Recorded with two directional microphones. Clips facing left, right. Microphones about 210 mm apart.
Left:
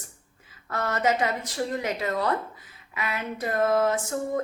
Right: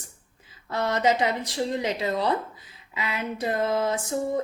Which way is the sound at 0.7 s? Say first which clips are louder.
Right 2 dB; 25° right (ahead or behind).